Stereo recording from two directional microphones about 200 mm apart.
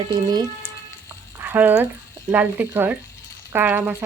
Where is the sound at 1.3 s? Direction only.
10° right (ahead or behind).